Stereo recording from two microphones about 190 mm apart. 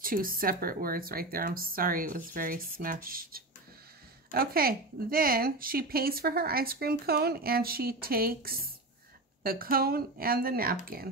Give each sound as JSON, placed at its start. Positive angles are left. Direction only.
{"t": 0.0, "sound": "speech", "side_deg": -50}